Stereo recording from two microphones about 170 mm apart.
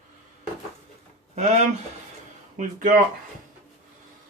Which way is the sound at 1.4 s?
40° right (ahead or behind).